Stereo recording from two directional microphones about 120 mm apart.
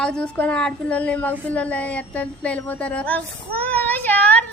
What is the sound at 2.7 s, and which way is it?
Speech, 10° left (ahead or behind).